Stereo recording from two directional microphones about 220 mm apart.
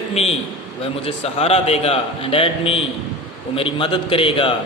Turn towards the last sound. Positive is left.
turn(degrees=25)  # may be behind; listen again after turning